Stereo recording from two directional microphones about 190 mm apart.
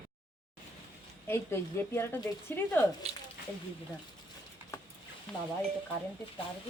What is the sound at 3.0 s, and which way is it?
Speech, 35° right (ahead or behind).